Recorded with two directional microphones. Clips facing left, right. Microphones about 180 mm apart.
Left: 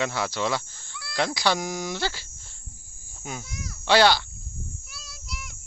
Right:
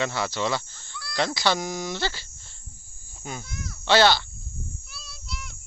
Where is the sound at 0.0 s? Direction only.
5° left (ahead or behind).